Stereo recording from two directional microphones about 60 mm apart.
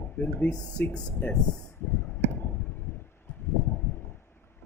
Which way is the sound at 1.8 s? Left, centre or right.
Left.